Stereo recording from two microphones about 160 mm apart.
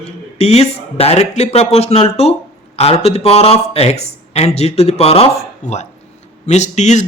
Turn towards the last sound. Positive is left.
turn(degrees=45)  # may be behind; listen again after turning